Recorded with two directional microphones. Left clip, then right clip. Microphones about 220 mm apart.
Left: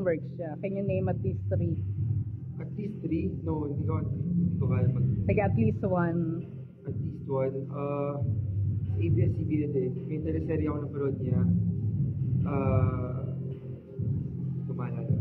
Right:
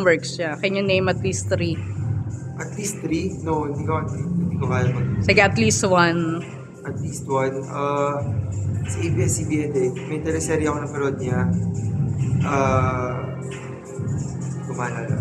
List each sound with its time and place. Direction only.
0.0 s a man's voice: 30° right (ahead or behind)
2.8 s a man's voice: 15° right (ahead or behind)
7.2 s speech: 15° right (ahead or behind)
9.2 s speech: 15° right (ahead or behind)
12.4 s speech: 15° right (ahead or behind)